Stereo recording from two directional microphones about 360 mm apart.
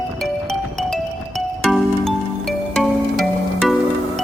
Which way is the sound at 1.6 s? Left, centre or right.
Centre.